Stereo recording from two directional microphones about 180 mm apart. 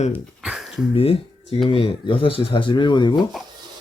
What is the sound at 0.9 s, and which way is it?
Speech, 35° left (ahead or behind).